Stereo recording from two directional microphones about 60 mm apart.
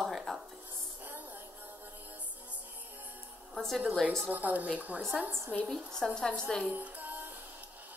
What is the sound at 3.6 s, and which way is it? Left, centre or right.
Speech, centre.